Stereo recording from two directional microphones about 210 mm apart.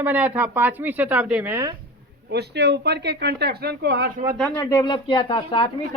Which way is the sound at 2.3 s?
55° right (ahead or behind).